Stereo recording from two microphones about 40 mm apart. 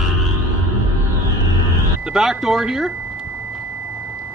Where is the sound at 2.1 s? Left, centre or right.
Centre.